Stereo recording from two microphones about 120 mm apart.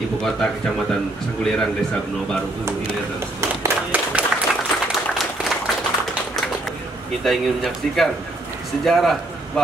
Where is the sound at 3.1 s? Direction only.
20° right (ahead or behind).